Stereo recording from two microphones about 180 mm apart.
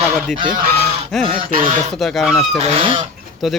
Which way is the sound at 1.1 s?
Centre (ahead or behind).